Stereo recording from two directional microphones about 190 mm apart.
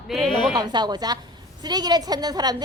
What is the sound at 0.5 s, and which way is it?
A woman's voice, 20° right (ahead or behind).